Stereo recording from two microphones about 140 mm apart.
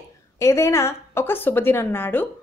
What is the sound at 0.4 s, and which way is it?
A woman's voice, 20° left (ahead or behind).